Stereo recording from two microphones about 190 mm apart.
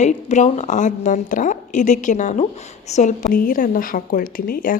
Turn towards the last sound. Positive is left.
turn(degrees=45)  # may be behind; listen again after turning